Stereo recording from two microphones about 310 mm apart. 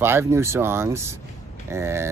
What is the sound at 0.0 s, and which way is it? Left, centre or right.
Speech, centre.